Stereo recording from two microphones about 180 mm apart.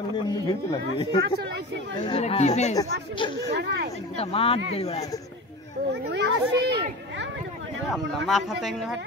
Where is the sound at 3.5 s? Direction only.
70° right (ahead or behind).